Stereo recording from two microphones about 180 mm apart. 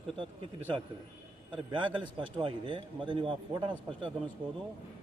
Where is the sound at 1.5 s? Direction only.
25° right (ahead or behind).